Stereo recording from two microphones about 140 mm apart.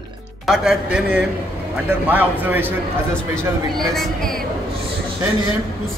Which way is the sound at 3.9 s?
Centre (ahead or behind).